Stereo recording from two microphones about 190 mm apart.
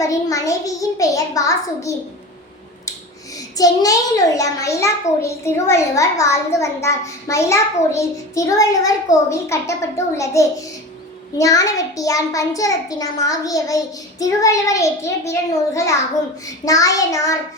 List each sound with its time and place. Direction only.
0.0 s a child's voice: 15° left (ahead or behind)
3.6 s a child's voice: 20° left (ahead or behind)